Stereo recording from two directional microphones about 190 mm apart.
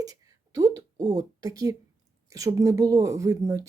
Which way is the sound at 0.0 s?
20° right (ahead or behind).